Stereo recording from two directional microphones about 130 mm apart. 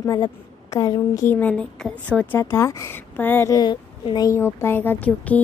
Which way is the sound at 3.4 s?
30° left (ahead or behind).